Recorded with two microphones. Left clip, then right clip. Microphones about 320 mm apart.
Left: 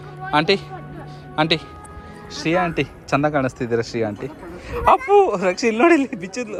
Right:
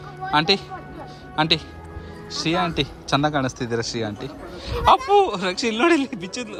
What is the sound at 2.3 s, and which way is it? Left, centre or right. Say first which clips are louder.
Speech: left 2 dB; centre.